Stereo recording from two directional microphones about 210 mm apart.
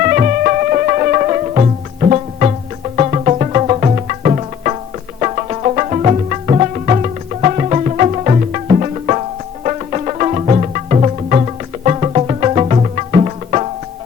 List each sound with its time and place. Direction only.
0.0 s music: 40° right (ahead or behind)